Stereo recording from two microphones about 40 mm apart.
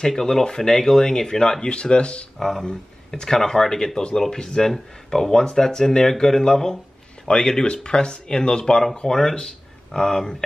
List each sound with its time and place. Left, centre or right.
0.1 s speech: centre; by 2.2 s left
2.3 s speech: centre
2.6 s speech: centre